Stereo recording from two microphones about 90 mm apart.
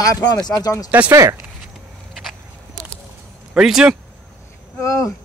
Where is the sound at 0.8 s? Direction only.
15° right (ahead or behind).